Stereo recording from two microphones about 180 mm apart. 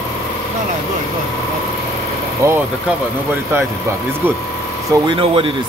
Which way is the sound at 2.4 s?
15° right (ahead or behind).